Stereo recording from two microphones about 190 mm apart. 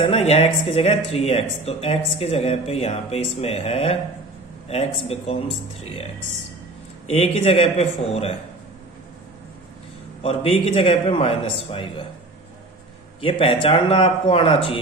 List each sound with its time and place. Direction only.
0.0 s speech: 30° left (ahead or behind)
7.1 s speech: 30° left (ahead or behind)
10.2 s speech: 30° left (ahead or behind)
13.2 s a man's voice: 30° left (ahead or behind)